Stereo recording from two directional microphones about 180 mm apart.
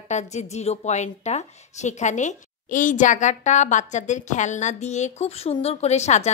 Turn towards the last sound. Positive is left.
turn(degrees=40)  # may be behind; listen again after turning